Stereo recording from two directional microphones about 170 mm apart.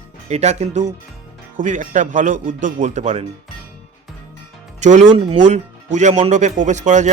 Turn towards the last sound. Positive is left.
turn(degrees=-45)  # may be behind; listen again after turning